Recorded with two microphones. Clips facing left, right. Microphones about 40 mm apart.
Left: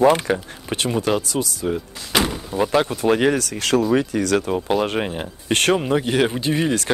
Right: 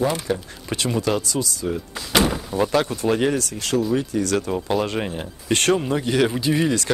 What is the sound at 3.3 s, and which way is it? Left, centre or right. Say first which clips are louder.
Speech: left 3 dB; left.